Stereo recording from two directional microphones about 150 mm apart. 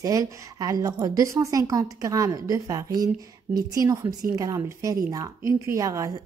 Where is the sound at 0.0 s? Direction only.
25° right (ahead or behind).